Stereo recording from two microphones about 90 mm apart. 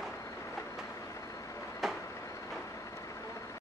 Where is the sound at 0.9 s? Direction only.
35° left (ahead or behind).